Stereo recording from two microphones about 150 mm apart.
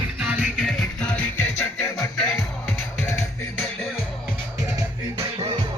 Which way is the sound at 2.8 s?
15° left (ahead or behind).